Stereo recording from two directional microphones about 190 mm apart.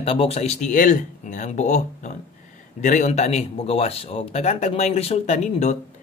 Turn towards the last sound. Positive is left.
turn(degrees=35)  # may be behind; listen again after turning